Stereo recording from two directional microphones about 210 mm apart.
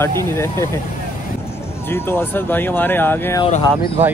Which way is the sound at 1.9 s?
10° left (ahead or behind).